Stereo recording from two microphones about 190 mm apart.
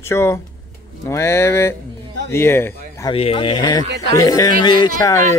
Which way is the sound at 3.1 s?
30° left (ahead or behind).